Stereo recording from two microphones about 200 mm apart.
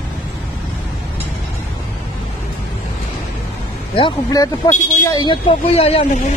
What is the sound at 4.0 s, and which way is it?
Speech, 20° left (ahead or behind).